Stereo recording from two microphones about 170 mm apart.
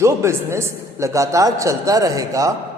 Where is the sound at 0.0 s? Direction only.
15° right (ahead or behind).